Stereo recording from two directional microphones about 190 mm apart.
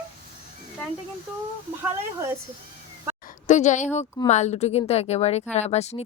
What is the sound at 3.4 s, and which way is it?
A woman's voice, 40° left (ahead or behind).